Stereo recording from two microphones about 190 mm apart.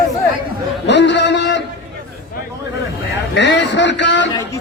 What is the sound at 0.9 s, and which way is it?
Speech, 65° left (ahead or behind).